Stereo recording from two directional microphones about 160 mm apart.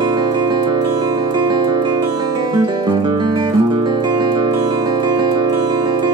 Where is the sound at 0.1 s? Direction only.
25° right (ahead or behind).